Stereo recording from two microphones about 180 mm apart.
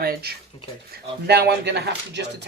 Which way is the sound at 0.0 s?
55° right (ahead or behind).